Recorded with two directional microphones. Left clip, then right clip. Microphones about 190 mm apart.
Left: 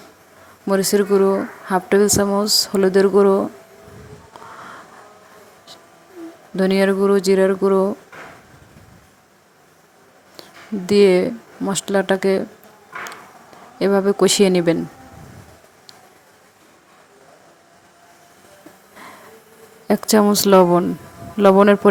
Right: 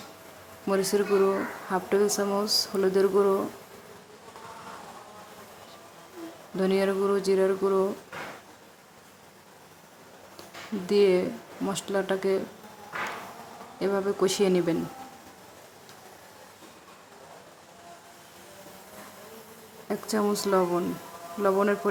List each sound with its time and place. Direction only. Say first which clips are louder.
0.7 s speech: left 8 dB; 30° left (ahead or behind)
6.6 s speech: left 8 dB; 30° left (ahead or behind)
10.8 s speech: left 9 dB; 30° left (ahead or behind)
13.7 s speech: left 10 dB; 35° left (ahead or behind)
19.9 s speech: left 12 dB; 40° left (ahead or behind)